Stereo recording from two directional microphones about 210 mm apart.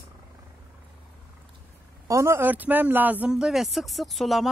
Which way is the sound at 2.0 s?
15° right (ahead or behind).